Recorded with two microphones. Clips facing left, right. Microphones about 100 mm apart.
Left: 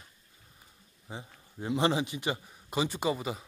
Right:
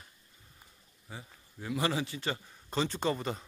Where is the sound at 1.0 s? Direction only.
25° left (ahead or behind); by 3.5 s 5° left (ahead or behind).